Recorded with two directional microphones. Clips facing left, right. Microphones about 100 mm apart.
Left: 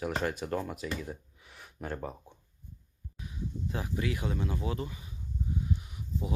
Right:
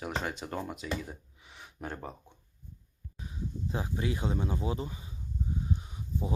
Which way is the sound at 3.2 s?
30° right (ahead or behind).